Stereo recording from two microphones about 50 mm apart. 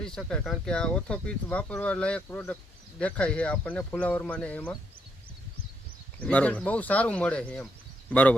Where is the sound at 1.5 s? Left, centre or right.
Left.